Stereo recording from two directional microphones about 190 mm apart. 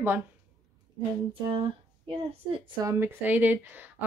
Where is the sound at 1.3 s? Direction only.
30° right (ahead or behind).